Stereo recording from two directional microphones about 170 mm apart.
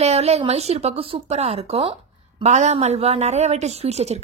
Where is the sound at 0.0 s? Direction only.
40° right (ahead or behind).